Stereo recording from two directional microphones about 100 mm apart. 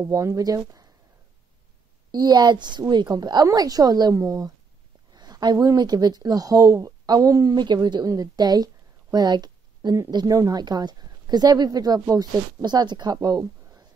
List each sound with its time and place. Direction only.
0.0 s speech: 30° right (ahead or behind)
2.1 s a woman's voice: 45° right (ahead or behind)
9.1 s a sound: 45° right (ahead or behind)
10.1 s speech: 35° right (ahead or behind)